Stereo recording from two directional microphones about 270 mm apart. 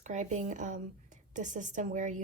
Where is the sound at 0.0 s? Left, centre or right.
Right.